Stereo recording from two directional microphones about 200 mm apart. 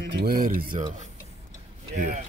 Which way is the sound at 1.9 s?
40° right (ahead or behind).